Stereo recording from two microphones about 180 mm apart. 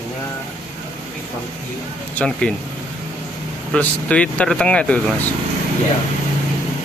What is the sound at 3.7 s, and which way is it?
Speech, 5° left (ahead or behind).